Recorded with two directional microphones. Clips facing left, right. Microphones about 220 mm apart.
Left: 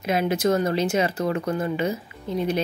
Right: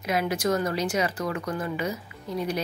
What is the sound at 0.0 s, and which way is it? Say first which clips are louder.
Speech: left 4 dB; 25° left (ahead or behind).